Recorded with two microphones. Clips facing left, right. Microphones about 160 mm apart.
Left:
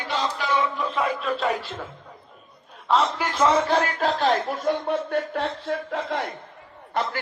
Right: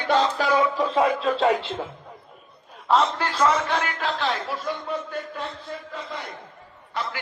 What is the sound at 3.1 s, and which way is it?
A man's voice, 20° left (ahead or behind).